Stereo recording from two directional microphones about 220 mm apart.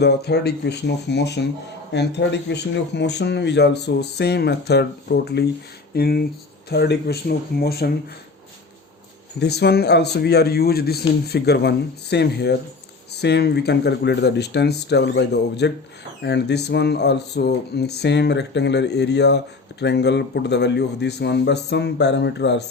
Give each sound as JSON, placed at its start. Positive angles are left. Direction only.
{"t": 0.0, "sound": "speech", "side_deg": 50}
{"t": 9.4, "sound": "speech", "side_deg": 50}